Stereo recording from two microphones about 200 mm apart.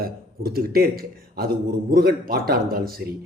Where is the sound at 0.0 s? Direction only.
50° right (ahead or behind).